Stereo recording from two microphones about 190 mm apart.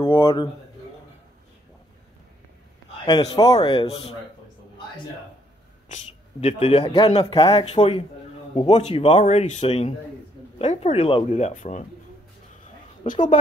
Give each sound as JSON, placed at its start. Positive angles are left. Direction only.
{"t": 0.0, "sound": "a man's voice", "side_deg": 30}
{"t": 3.1, "sound": "a man's voice", "side_deg": 20}
{"t": 6.4, "sound": "a man's voice", "side_deg": 30}
{"t": 13.0, "sound": "a woman's voice", "side_deg": 45}